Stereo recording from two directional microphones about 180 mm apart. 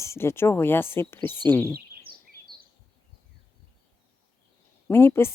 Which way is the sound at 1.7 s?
55° right (ahead or behind).